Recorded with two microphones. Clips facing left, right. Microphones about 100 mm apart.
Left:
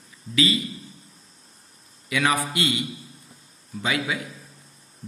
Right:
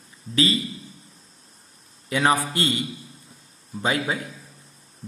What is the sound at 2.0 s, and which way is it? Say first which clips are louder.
Speech: right 2 dB; 35° right (ahead or behind).